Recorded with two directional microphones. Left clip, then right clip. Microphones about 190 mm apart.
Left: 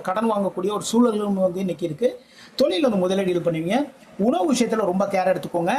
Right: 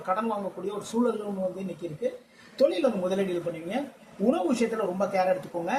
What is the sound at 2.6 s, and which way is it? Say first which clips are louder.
Speech: left 4 dB; 50° left (ahead or behind).